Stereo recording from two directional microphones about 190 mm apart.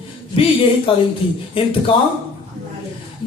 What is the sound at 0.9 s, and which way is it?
Speech, 25° left (ahead or behind).